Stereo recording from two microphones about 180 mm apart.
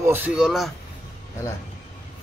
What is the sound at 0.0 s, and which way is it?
Speech, 10° right (ahead or behind).